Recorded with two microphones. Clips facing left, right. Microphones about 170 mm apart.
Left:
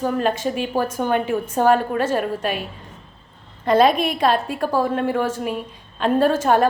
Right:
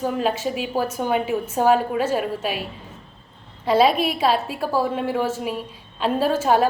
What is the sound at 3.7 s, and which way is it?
A woman's voice, 5° right (ahead or behind).